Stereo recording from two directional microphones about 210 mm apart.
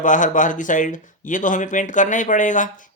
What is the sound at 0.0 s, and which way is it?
Speech, 35° left (ahead or behind).